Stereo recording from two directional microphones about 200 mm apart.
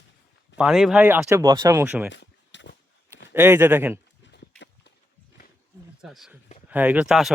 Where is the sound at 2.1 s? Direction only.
65° left (ahead or behind).